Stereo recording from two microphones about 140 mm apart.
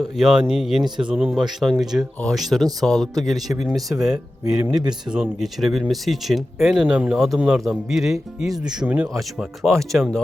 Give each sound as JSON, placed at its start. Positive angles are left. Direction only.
{"t": 0.2, "sound": "speech", "side_deg": -5}
{"t": 4.6, "sound": "speech", "side_deg": -30}
{"t": 5.1, "sound": "speech", "side_deg": -5}